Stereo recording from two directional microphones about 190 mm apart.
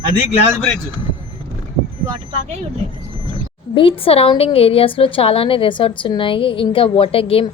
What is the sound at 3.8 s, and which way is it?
A woman's voice, 30° left (ahead or behind).